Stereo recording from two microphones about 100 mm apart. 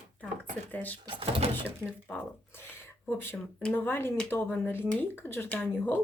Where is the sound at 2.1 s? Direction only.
15° left (ahead or behind).